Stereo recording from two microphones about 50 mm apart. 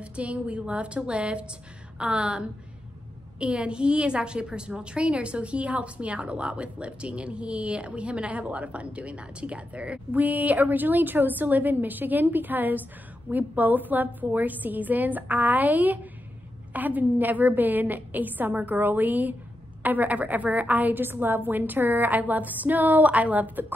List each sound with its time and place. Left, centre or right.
0.0 s a woman's voice: right